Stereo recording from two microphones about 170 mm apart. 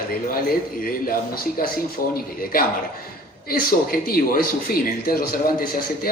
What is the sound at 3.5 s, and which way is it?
Speech, 60° left (ahead or behind).